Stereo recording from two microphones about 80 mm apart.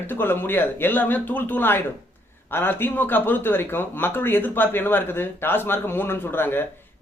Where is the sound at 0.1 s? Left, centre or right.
Left.